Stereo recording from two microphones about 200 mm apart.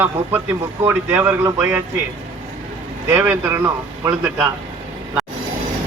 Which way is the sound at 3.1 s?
10° right (ahead or behind).